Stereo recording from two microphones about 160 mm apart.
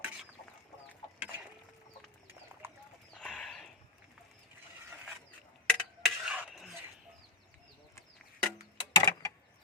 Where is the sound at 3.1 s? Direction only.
5° left (ahead or behind).